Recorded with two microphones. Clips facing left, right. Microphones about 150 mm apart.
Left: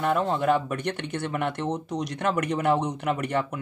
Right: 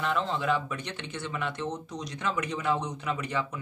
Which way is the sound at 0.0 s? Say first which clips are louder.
Left 5 dB; 50° left (ahead or behind).